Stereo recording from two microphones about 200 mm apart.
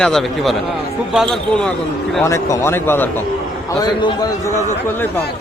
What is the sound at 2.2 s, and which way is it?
A man's voice, 15° left (ahead or behind).